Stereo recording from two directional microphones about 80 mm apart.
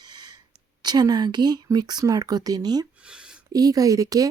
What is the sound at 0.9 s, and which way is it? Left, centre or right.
A woman's voice, right.